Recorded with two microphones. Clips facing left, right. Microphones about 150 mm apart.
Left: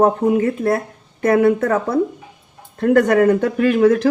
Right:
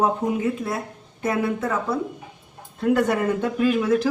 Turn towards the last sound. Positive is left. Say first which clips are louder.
# left 6 dB
turn(degrees=60)  # may be behind; listen again after turning